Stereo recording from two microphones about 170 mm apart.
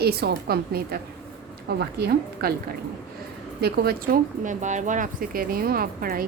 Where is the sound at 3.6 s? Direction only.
65° right (ahead or behind).